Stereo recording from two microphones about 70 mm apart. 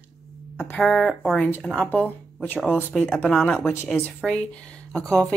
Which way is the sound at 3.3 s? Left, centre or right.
Centre.